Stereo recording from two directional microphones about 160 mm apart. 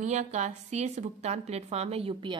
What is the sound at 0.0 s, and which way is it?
A woman's voice, 45° right (ahead or behind).